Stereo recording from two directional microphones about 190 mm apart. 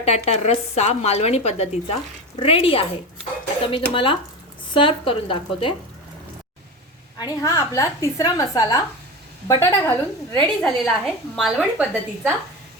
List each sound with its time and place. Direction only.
0.0 s speech: 35° left (ahead or behind)
7.2 s a woman's voice: 20° left (ahead or behind)
10.3 s a woman's voice: 5° left (ahead or behind)